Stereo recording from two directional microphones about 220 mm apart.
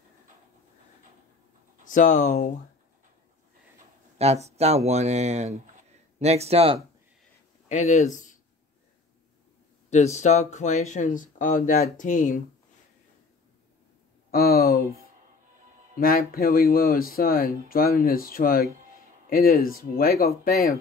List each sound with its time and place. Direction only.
1.9 s speech: 35° left (ahead or behind)
4.5 s speech: 30° right (ahead or behind)
7.6 s speech: 30° left (ahead or behind)
9.8 s speech: 30° left (ahead or behind)
14.3 s speech: 45° left (ahead or behind)
16.0 s speech: 40° left (ahead or behind)